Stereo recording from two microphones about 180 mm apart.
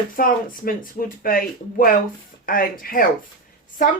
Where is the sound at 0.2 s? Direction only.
50° left (ahead or behind).